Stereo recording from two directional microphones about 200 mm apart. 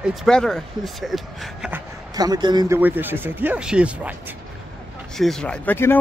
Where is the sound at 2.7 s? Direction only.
10° right (ahead or behind).